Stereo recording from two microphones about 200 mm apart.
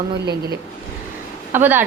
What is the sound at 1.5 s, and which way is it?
Speech, 10° right (ahead or behind).